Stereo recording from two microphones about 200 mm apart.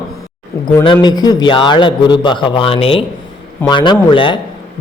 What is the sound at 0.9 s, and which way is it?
A man's voice, 20° left (ahead or behind).